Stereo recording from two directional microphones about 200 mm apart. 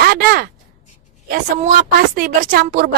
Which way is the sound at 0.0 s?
50° right (ahead or behind).